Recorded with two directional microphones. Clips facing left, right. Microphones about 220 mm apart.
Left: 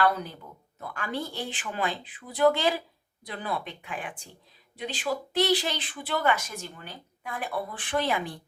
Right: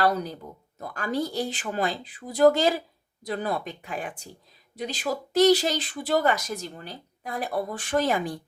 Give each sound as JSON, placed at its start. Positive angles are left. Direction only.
{"t": 0.0, "sound": "speech", "side_deg": -40}